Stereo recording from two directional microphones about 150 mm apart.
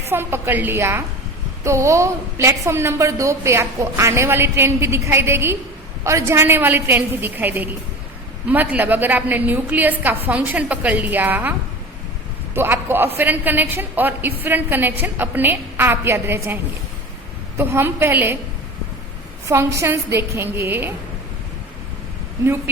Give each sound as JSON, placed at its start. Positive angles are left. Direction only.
{"t": 0.1, "sound": "a woman's voice", "side_deg": -15}
{"t": 12.5, "sound": "a woman's voice", "side_deg": -15}
{"t": 17.6, "sound": "a woman's voice", "side_deg": -15}
{"t": 19.5, "sound": "a woman's voice", "side_deg": -20}